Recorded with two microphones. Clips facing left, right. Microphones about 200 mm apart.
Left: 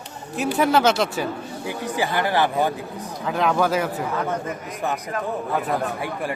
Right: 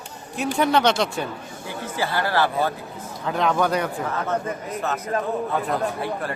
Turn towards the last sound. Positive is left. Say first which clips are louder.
# even
turn(degrees=15)  # may be behind; listen again after turning